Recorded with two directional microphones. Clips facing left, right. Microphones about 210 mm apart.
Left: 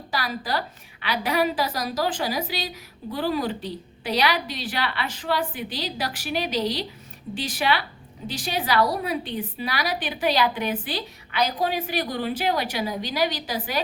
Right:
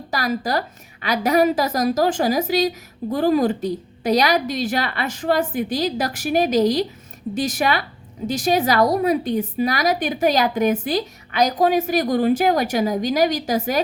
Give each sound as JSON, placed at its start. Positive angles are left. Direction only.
{"t": 0.1, "sound": "a woman's voice", "side_deg": -45}